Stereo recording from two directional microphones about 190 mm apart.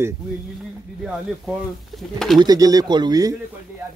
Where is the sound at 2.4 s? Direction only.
20° right (ahead or behind).